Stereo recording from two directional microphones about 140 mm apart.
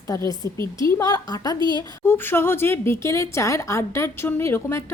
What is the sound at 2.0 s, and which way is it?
Speech, 15° left (ahead or behind).